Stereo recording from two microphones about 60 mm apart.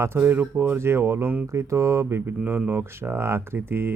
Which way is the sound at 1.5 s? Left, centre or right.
Right.